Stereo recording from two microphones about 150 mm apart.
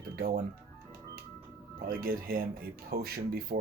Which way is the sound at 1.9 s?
75° right (ahead or behind).